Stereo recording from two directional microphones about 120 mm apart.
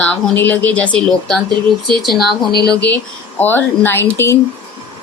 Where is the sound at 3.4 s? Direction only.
15° left (ahead or behind).